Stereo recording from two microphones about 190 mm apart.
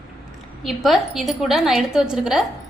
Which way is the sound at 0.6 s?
Centre (ahead or behind).